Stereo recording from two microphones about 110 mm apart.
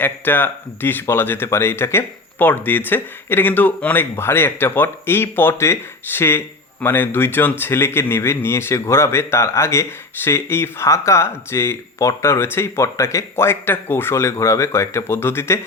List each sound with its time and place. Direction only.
0.0 s speech: 20° left (ahead or behind)